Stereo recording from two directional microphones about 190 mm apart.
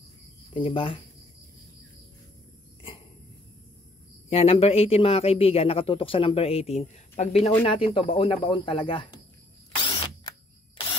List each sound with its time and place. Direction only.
0.6 s speech: 30° left (ahead or behind)
4.3 s speech: 30° left (ahead or behind)